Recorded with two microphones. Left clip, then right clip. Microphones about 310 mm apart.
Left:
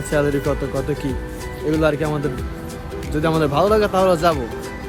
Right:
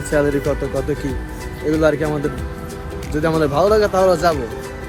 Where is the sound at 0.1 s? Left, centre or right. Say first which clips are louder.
Right 2 dB; centre.